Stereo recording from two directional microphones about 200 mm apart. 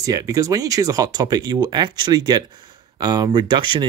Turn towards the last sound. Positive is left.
turn(degrees=-25)  # may be behind; listen again after turning